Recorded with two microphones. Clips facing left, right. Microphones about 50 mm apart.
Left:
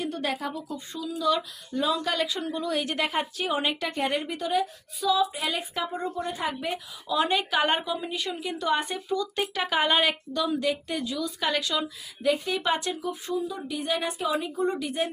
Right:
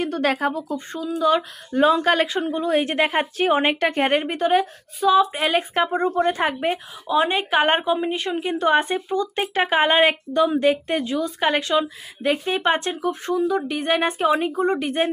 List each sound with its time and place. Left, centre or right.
0.0 s speech: right
0.4 s a woman's voice: right